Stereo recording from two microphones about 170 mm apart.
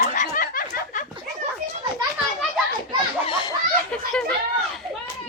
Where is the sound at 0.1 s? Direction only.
55° left (ahead or behind).